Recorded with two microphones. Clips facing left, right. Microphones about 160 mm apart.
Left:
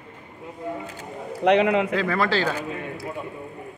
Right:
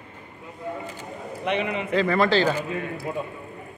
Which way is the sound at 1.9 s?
5° left (ahead or behind).